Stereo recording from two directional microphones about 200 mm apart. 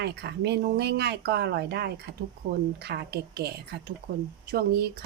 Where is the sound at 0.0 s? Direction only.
55° right (ahead or behind).